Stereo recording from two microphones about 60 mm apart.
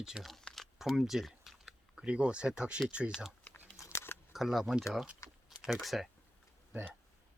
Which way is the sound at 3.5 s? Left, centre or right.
Left.